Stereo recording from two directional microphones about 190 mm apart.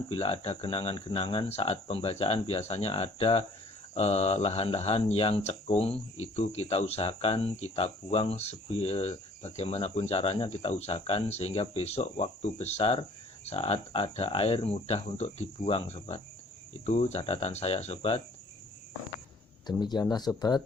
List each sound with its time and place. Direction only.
0.1 s speech: 30° left (ahead or behind)
19.8 s speech: 20° left (ahead or behind)